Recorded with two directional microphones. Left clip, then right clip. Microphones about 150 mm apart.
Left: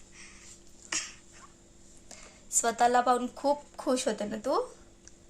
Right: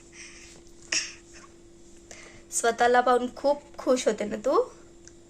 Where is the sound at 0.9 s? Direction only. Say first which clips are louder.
Right 6 dB; 30° left (ahead or behind).